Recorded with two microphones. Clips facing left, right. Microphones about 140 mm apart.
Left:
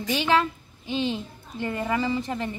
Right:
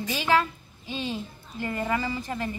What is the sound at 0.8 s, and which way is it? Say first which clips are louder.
Speech: left 5 dB; 20° left (ahead or behind).